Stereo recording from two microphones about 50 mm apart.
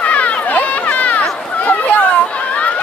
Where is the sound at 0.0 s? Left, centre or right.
Left.